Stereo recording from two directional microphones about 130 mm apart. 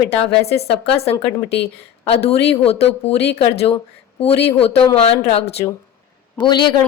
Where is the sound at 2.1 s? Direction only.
50° left (ahead or behind).